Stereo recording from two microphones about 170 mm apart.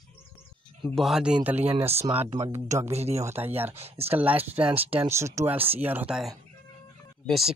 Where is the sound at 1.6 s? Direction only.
35° right (ahead or behind).